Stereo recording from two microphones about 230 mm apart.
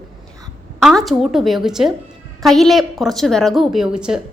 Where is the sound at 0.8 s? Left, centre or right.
Centre.